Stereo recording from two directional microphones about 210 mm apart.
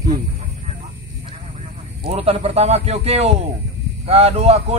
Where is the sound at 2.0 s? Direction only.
30° right (ahead or behind).